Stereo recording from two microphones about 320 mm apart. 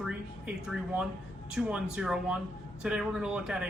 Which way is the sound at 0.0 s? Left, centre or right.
Centre.